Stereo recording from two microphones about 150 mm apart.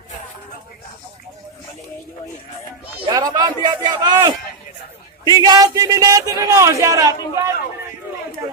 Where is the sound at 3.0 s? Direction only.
25° right (ahead or behind).